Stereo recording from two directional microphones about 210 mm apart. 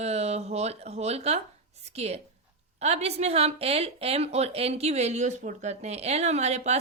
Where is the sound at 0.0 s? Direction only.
30° right (ahead or behind).